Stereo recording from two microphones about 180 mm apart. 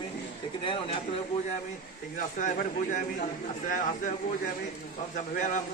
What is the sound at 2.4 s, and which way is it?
A man's voice, 45° left (ahead or behind).